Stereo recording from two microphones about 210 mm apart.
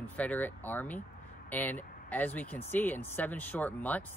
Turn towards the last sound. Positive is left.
turn(degrees=10)  # may be behind; listen again after turning